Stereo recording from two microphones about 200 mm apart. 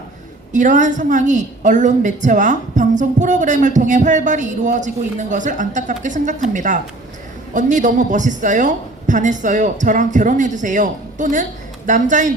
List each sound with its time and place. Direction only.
0.5 s a woman's voice: 40° right (ahead or behind)